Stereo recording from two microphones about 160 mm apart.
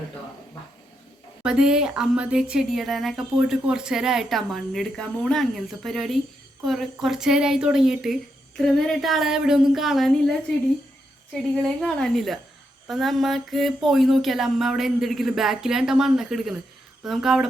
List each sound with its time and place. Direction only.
1.5 s speech: 5° right (ahead or behind)
11.3 s speech: 5° left (ahead or behind)